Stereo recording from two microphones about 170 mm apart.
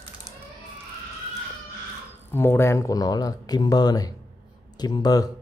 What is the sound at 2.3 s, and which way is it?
Speech, 15° left (ahead or behind).